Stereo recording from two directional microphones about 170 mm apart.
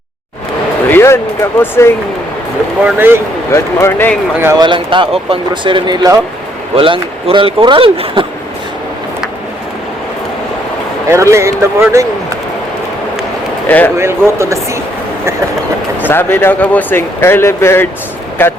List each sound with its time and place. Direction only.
0.9 s speech: 15° left (ahead or behind)
2.8 s speech: 10° right (ahead or behind)
3.5 s speech: 15° left (ahead or behind)
4.6 s a man's voice: 30° right (ahead or behind)
11.1 s speech: 15° right (ahead or behind)
13.7 s speech: 10° left (ahead or behind)
14.0 s speech: 15° right (ahead or behind)
16.0 s speech: 10° left (ahead or behind)